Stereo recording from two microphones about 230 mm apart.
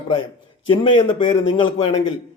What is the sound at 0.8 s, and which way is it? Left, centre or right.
Speech, left.